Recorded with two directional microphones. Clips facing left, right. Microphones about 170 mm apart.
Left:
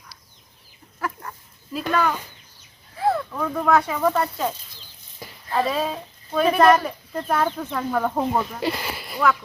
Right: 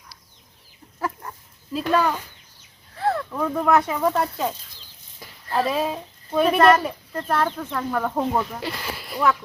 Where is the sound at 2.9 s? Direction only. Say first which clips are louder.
Left 2 dB; 10° left (ahead or behind).